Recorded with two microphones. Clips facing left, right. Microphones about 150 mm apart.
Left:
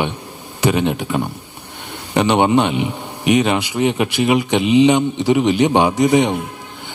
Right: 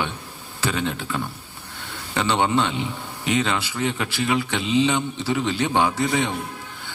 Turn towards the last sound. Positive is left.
turn(degrees=15)  # may be behind; listen again after turning